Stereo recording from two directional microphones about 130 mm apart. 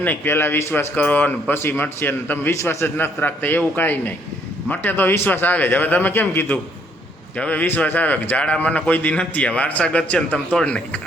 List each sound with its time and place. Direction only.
0.0 s speech: 15° left (ahead or behind)